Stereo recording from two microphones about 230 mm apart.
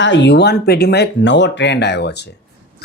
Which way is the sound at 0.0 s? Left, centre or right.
Left.